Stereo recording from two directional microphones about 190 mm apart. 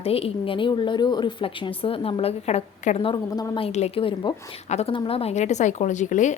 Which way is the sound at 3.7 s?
35° left (ahead or behind).